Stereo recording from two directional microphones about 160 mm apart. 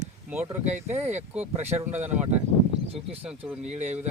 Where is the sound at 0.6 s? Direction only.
45° right (ahead or behind).